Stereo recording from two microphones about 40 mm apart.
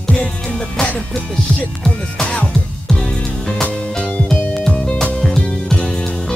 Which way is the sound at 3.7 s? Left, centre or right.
Left.